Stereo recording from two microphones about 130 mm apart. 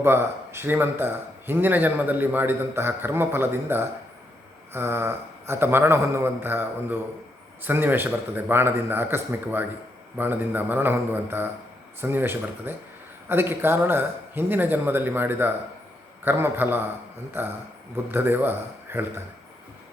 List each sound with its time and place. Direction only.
0.0 s speech: 20° right (ahead or behind)